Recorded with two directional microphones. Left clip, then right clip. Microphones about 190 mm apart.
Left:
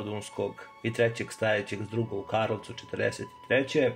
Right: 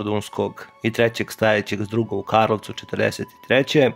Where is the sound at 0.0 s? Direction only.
50° right (ahead or behind).